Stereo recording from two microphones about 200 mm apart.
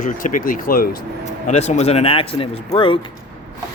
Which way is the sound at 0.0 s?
40° left (ahead or behind).